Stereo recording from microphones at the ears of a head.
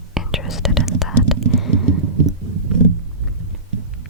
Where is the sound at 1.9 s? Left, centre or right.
Right.